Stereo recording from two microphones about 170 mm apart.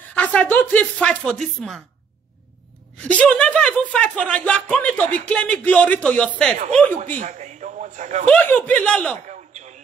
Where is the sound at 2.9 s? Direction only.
5° left (ahead or behind).